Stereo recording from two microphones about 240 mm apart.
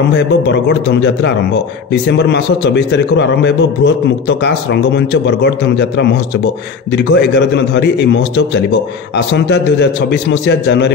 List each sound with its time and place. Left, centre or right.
0.5 s speech: left